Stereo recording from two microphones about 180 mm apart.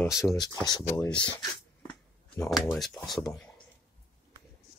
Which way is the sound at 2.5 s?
Centre (ahead or behind).